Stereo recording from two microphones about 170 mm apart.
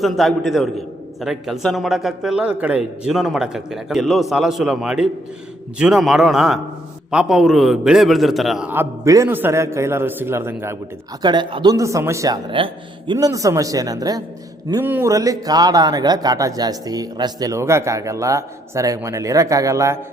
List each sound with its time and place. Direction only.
0.0 s a man's voice: centre (ahead or behind)
11.2 s a man's voice: 25° right (ahead or behind)
12.5 s speech: 30° right (ahead or behind)
13.1 s a man's voice: 20° right (ahead or behind)